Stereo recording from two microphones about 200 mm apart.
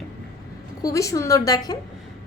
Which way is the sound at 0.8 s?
15° left (ahead or behind).